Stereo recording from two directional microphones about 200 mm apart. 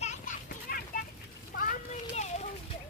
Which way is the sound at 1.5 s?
45° left (ahead or behind).